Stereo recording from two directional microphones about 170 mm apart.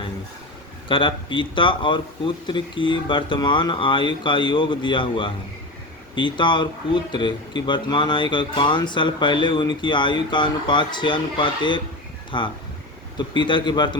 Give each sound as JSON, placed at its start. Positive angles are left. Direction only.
{"t": 0.9, "sound": "speech", "side_deg": 30}